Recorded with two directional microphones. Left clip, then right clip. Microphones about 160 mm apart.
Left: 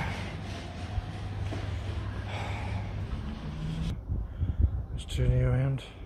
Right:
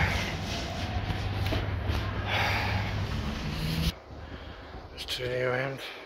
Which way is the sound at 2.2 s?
10° left (ahead or behind).